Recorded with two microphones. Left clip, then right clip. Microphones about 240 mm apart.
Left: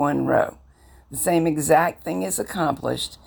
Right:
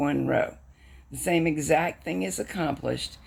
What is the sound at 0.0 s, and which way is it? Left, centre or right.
Speech, centre.